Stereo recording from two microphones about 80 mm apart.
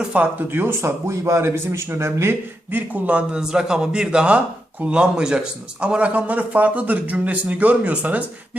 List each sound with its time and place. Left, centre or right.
0.0 s speech: centre